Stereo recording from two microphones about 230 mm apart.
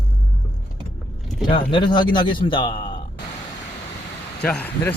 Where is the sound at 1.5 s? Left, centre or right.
Left.